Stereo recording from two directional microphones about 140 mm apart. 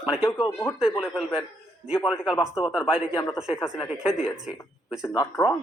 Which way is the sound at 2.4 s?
5° right (ahead or behind).